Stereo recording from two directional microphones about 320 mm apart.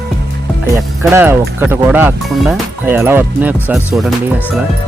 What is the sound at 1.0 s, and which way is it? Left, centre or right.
Speech, centre.